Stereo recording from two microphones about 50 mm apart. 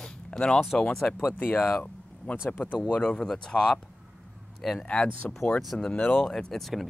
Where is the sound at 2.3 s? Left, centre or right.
Left.